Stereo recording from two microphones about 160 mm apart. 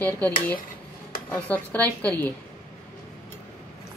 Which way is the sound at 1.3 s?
10° left (ahead or behind).